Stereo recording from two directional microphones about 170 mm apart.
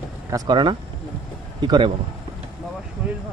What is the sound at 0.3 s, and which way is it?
Speech, 25° right (ahead or behind).